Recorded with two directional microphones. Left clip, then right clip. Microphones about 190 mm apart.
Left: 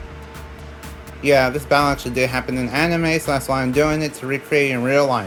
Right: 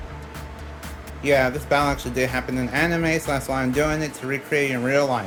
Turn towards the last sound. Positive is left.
turn(degrees=30)  # may be behind; listen again after turning